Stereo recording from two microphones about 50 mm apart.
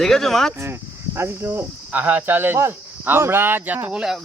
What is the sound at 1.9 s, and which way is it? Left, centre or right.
Speech, right.